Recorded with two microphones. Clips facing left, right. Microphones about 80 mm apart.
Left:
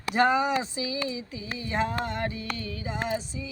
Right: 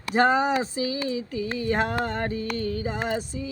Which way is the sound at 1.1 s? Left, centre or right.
Right.